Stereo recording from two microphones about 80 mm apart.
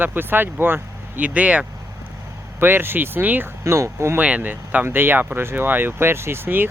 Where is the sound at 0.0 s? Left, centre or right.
Right.